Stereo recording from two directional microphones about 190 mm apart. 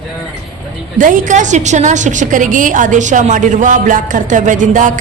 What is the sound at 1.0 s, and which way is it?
A woman's voice, 45° right (ahead or behind).